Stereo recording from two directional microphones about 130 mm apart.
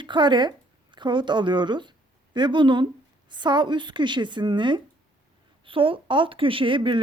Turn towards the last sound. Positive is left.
turn(degrees=-40)  # may be behind; listen again after turning